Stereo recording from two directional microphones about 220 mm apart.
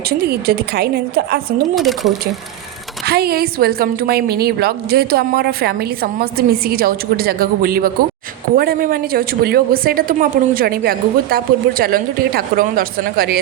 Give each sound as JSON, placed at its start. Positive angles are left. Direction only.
{"t": 0.1, "sound": "a woman's voice", "side_deg": -45}
{"t": 1.7, "sound": "speech", "side_deg": 0}
{"t": 3.1, "sound": "a woman's voice", "side_deg": -45}